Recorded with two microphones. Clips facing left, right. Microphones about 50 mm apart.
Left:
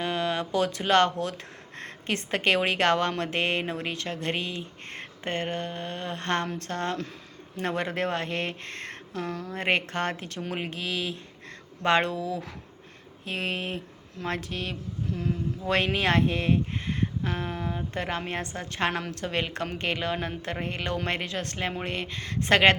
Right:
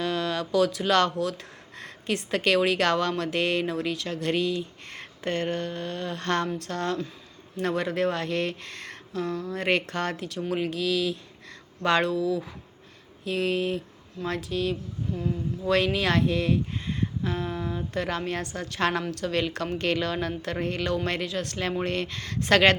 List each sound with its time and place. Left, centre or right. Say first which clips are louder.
0.0 s a sound: even; left
1.2 s speech: right 3 dB; left
21.7 s speech: right 4 dB; left